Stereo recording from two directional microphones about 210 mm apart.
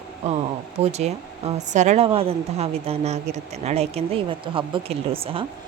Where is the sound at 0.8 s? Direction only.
30° right (ahead or behind).